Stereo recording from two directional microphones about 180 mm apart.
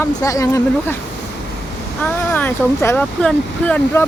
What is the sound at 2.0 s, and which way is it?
Speech, 10° left (ahead or behind).